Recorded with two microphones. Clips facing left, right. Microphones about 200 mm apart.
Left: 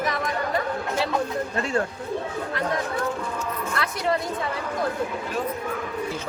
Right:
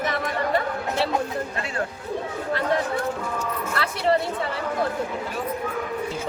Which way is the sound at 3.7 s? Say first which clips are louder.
Right 3 dB; 30° right (ahead or behind).